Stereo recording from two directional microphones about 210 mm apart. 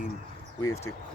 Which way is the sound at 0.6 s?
15° left (ahead or behind).